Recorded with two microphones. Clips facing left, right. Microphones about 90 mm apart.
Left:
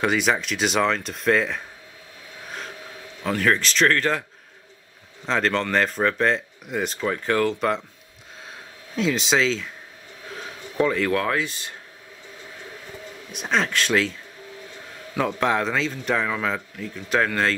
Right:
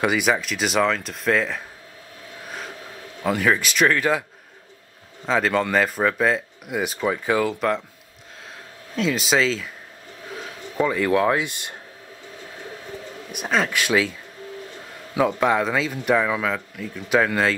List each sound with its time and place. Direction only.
0.0 s speech: 5° right (ahead or behind)
3.3 s speech: 5° right (ahead or behind)
5.2 s speech: 5° right (ahead or behind)
8.9 s speech: centre (ahead or behind)
10.3 s a sound: 5° right (ahead or behind)
11.1 s speech: 15° right (ahead or behind)
13.4 s speech: 5° right (ahead or behind)
15.1 s speech: 5° right (ahead or behind)